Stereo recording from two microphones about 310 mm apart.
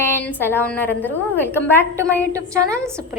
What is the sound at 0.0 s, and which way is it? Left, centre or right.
A woman's voice, centre.